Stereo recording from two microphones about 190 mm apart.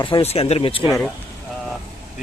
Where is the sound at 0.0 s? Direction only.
30° left (ahead or behind).